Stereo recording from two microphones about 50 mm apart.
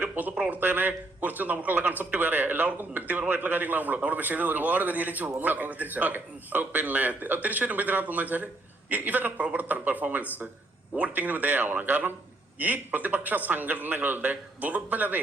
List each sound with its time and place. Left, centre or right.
0.2 s speech: right